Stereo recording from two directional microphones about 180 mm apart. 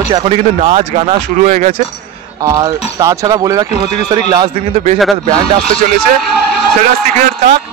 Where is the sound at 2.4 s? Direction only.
20° right (ahead or behind).